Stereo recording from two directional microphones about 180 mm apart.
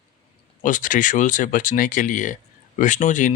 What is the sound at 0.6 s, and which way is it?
Speech, 45° left (ahead or behind).